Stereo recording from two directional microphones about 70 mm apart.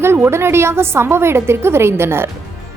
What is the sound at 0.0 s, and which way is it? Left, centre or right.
A woman's voice, right.